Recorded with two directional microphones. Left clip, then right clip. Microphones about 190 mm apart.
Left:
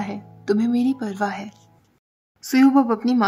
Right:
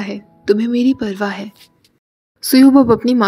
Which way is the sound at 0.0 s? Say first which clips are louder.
Right 6 dB; 10° right (ahead or behind).